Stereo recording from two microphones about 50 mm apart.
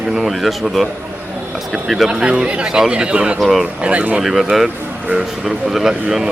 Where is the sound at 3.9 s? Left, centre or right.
Right.